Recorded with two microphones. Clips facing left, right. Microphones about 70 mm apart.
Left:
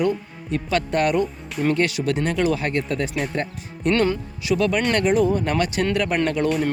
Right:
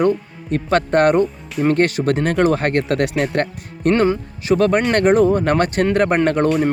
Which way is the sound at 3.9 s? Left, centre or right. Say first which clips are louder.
Right 4 dB; right.